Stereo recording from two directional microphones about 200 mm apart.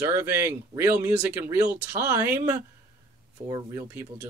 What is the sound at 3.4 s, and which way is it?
Speech, 20° right (ahead or behind).